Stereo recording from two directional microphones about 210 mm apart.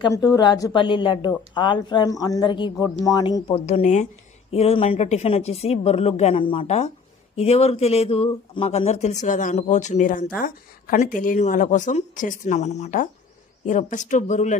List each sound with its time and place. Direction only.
0.0 s a woman's voice: 15° left (ahead or behind); by 14.6 s 35° left (ahead or behind)